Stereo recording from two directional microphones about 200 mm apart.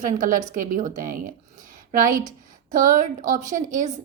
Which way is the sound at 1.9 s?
40° right (ahead or behind).